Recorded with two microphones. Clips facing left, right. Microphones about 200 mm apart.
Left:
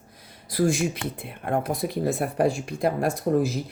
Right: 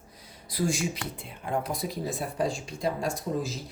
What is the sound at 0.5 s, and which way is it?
Speech, 55° left (ahead or behind).